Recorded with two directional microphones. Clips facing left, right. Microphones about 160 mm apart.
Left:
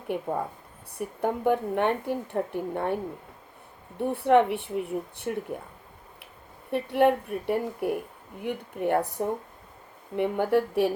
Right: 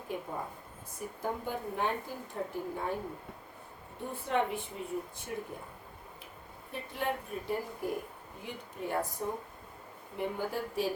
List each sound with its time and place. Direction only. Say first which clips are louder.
0.1 s a woman's voice: left 9 dB; 65° left (ahead or behind)
4.0 s speech: left 11 dB; 65° left (ahead or behind)
6.7 s speech: left 13 dB; 65° left (ahead or behind)